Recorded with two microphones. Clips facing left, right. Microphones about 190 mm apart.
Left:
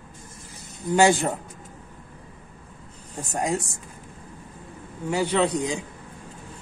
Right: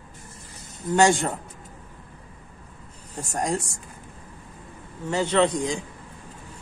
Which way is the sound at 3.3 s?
Centre (ahead or behind).